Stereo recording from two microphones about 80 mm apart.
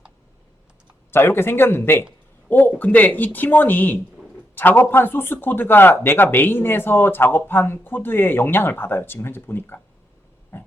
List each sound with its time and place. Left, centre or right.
1.1 s speech: left
10.5 s pig: left